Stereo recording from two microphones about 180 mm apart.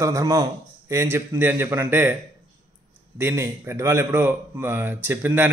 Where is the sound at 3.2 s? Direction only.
15° right (ahead or behind).